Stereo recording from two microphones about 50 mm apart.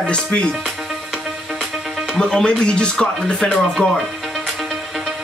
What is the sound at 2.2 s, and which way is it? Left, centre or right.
Speech, centre.